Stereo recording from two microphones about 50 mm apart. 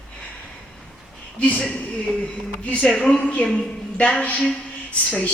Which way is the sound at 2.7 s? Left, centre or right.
Left.